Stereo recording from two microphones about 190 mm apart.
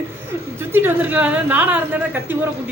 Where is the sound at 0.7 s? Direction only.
10° right (ahead or behind).